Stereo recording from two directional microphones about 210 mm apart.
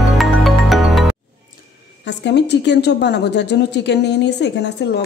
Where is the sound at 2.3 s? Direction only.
55° left (ahead or behind).